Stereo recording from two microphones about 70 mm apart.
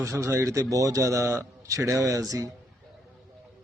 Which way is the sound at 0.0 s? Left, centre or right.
Right.